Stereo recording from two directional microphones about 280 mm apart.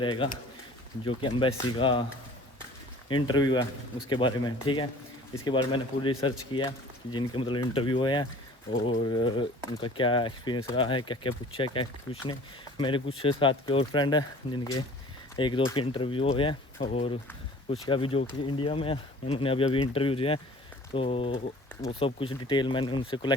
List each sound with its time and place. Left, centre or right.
0.0 s speech: centre
3.1 s speech: centre